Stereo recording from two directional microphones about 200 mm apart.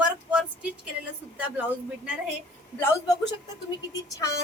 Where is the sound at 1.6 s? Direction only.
5° right (ahead or behind).